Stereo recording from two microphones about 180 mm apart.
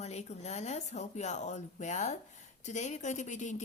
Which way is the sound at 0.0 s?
35° left (ahead or behind).